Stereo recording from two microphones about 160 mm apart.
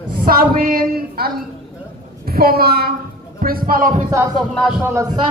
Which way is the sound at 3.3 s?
65° right (ahead or behind).